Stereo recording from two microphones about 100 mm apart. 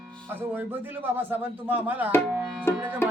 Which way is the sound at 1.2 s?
20° right (ahead or behind).